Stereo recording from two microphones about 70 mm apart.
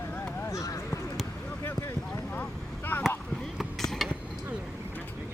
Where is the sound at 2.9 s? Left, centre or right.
Left.